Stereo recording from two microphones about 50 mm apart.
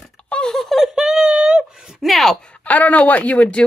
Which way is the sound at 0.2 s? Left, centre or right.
Left.